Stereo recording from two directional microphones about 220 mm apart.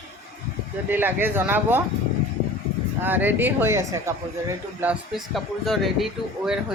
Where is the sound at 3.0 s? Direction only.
10° right (ahead or behind).